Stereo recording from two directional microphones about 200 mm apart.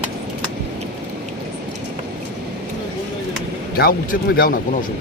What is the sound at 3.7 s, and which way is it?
Speech, 45° left (ahead or behind).